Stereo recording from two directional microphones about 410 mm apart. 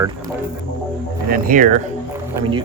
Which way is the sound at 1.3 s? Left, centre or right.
Centre.